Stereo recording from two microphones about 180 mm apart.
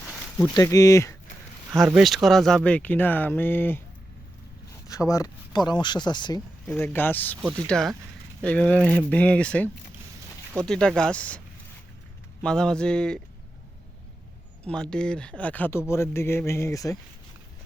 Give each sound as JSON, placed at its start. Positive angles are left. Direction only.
{"t": 0.4, "sound": "speech", "side_deg": 20}
{"t": 1.8, "sound": "speech", "side_deg": 0}
{"t": 4.9, "sound": "speech", "side_deg": 20}
{"t": 6.7, "sound": "speech", "side_deg": 10}
{"t": 14.7, "sound": "speech", "side_deg": 5}